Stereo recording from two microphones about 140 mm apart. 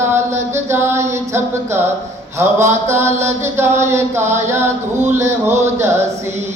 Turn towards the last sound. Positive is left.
turn(degrees=-20)  # may be behind; listen again after turning